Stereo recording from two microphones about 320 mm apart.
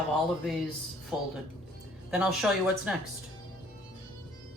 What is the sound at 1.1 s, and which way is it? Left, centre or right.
A woman's voice, centre.